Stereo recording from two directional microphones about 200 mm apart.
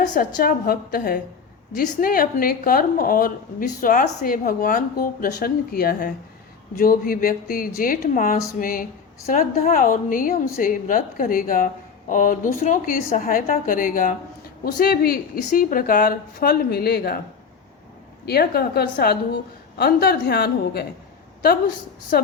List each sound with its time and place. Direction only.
0.0 s a woman's voice: 40° left (ahead or behind)
18.3 s a woman's voice: 50° left (ahead or behind)
22.1 s a woman's voice: 50° left (ahead or behind)